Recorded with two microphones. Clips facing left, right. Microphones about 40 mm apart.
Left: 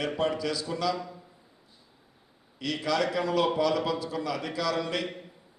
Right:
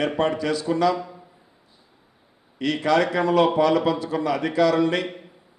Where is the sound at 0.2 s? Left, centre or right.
Right.